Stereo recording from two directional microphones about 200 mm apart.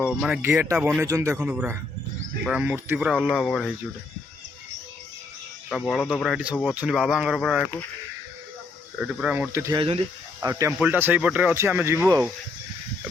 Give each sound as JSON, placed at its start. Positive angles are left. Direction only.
{"t": 0.0, "sound": "speech", "side_deg": -5}
{"t": 5.6, "sound": "speech", "side_deg": 0}
{"t": 9.0, "sound": "speech", "side_deg": -5}
{"t": 9.7, "sound": "speech", "side_deg": -25}
{"t": 10.4, "sound": "speech", "side_deg": -15}